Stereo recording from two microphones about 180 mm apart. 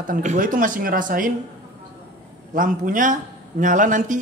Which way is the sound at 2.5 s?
50° right (ahead or behind).